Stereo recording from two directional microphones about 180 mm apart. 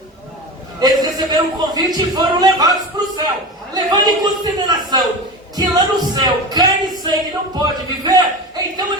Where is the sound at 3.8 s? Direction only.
25° right (ahead or behind).